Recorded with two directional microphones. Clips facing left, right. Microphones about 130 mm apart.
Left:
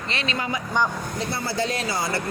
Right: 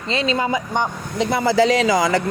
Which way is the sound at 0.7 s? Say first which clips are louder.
Right 1 dB; 75° right (ahead or behind).